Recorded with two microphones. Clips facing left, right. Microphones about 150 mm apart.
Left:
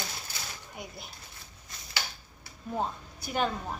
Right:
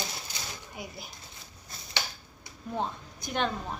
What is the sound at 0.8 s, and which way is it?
Speech, centre (ahead or behind).